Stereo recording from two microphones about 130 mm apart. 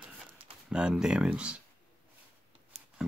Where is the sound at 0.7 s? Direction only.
5° right (ahead or behind).